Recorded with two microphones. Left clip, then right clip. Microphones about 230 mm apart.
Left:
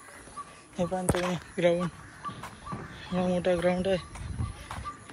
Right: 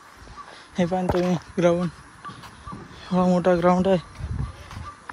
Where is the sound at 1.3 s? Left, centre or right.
Right.